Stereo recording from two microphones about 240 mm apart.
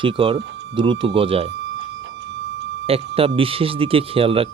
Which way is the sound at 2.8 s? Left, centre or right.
Right.